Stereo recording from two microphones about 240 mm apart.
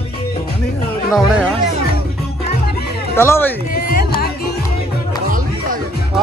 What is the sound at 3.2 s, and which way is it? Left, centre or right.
Speech, centre.